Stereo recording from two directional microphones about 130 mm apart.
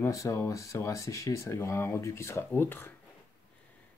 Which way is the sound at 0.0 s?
25° left (ahead or behind).